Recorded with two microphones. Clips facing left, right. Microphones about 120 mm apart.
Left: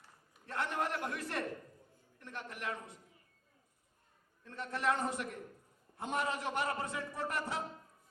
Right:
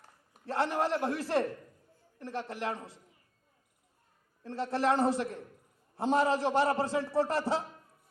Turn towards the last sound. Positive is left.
turn(degrees=-30)  # may be behind; listen again after turning